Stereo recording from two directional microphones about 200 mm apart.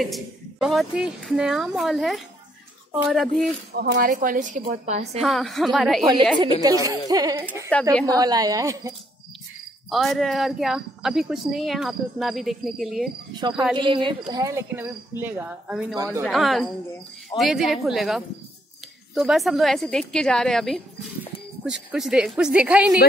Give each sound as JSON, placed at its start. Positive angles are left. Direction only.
{"t": 0.0, "sound": "a woman's voice", "side_deg": 0}
{"t": 3.7, "sound": "a woman's voice", "side_deg": -50}
{"t": 5.2, "sound": "a woman's voice", "side_deg": 0}
{"t": 6.4, "sound": "speech", "side_deg": -20}
{"t": 7.9, "sound": "a woman's voice", "side_deg": 5}
{"t": 8.2, "sound": "speech", "side_deg": -20}
{"t": 9.8, "sound": "a woman's voice", "side_deg": 0}
{"t": 13.3, "sound": "speech", "side_deg": -20}
{"t": 16.3, "sound": "a woman's voice", "side_deg": 0}